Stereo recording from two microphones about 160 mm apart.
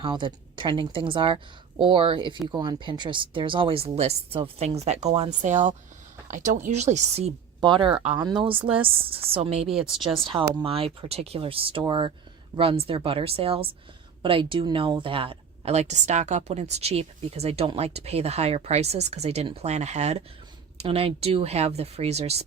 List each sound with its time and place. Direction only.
0.0 s speech: 30° right (ahead or behind)
7.6 s speech: 30° right (ahead or behind)
9.6 s speech: 5° right (ahead or behind)
10.5 s speech: 35° right (ahead or behind)